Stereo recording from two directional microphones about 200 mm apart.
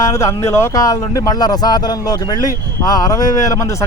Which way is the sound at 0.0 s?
15° left (ahead or behind).